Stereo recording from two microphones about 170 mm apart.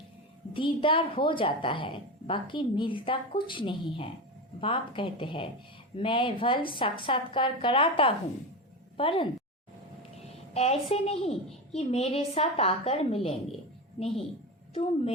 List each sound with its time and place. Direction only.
0.5 s a woman's voice: 30° left (ahead or behind)